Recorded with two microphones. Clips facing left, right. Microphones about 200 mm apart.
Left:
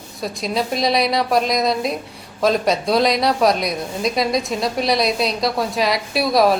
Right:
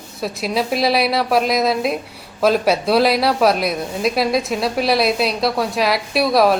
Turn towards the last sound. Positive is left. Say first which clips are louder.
# right 1 dB
turn(degrees=0)  # may be behind; listen again after turning